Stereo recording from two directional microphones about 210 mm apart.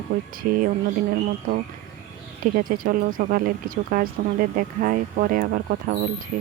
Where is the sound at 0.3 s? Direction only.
40° right (ahead or behind).